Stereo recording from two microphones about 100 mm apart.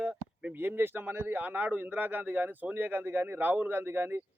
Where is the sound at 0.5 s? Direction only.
20° right (ahead or behind).